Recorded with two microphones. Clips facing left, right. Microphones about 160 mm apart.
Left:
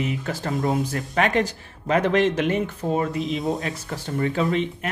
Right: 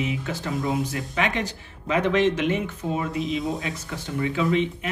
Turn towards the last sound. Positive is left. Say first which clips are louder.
# even
turn(degrees=40)  # may be behind; listen again after turning